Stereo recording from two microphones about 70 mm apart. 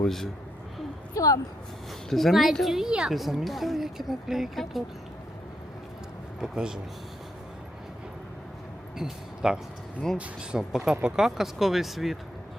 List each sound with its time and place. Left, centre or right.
0.0 s speech: centre
1.1 s a sound: left
2.0 s speech: centre
6.4 s speech: centre
9.0 s speech: centre
10.6 s speech: centre